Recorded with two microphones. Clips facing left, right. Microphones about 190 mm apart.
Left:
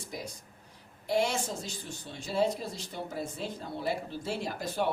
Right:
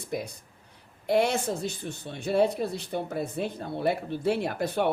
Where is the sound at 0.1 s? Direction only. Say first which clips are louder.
Right 9 dB; 60° right (ahead or behind).